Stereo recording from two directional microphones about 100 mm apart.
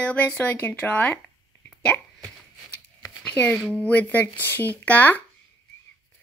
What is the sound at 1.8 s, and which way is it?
Hiccup, 10° left (ahead or behind).